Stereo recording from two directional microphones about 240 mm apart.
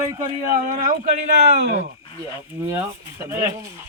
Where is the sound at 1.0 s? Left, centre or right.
Right.